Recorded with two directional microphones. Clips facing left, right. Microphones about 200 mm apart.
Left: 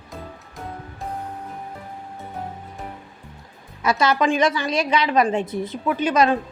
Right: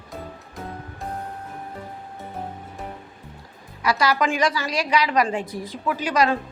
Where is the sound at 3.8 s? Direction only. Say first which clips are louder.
Left 2 dB; 25° left (ahead or behind).